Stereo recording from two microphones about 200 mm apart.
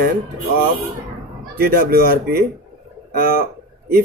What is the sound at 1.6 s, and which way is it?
Speech, 50° right (ahead or behind).